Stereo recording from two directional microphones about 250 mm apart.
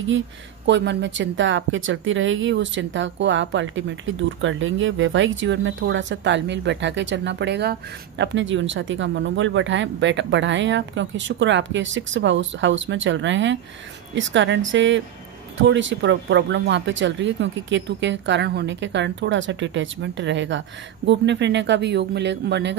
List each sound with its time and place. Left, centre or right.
0.7 s speech: right